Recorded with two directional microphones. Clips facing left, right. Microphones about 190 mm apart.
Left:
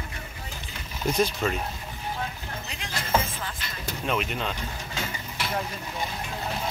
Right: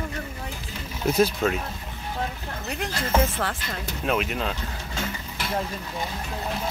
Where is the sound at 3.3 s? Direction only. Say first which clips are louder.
Right 7 dB; 75° right (ahead or behind).